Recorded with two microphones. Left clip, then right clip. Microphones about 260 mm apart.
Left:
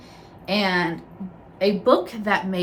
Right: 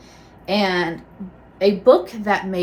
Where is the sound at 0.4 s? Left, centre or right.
Centre.